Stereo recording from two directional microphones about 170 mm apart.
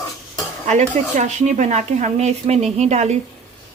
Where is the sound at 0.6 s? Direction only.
45° right (ahead or behind).